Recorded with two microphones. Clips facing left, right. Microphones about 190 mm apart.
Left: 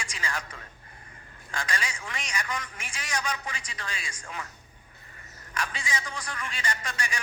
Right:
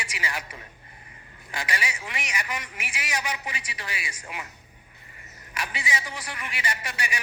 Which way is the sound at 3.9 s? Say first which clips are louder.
Right 3 dB; 5° right (ahead or behind).